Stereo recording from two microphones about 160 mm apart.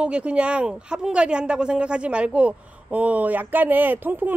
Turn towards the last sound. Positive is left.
turn(degrees=-10)  # may be behind; listen again after turning